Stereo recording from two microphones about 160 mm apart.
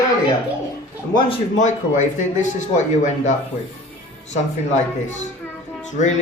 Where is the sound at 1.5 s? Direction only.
50° left (ahead or behind).